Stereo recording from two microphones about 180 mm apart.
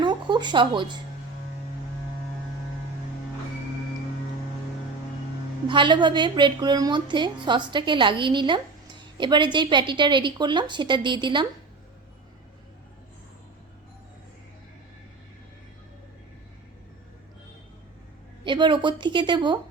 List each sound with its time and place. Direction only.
0.0 s speech: 25° right (ahead or behind)
5.6 s a woman's voice: 25° right (ahead or behind)
18.4 s a woman's voice: 25° right (ahead or behind)